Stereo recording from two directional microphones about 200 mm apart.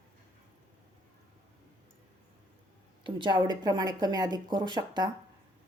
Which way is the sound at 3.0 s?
25° right (ahead or behind).